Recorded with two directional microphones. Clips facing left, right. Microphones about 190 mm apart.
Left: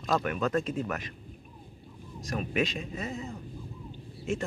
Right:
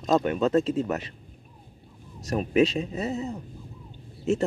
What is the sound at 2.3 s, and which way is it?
Speech, 35° right (ahead or behind).